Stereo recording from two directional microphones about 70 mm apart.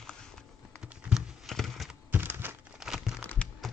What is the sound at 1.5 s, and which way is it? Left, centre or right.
Computer keyboard, centre.